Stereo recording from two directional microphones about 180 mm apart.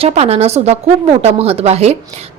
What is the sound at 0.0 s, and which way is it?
A woman's voice, 35° right (ahead or behind).